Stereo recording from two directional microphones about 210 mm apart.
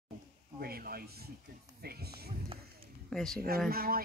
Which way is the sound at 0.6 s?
45° right (ahead or behind).